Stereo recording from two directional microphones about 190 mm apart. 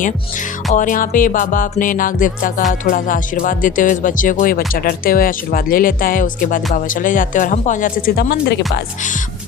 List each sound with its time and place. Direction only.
0.7 s speech: 45° left (ahead or behind); by 8.8 s 60° left (ahead or behind)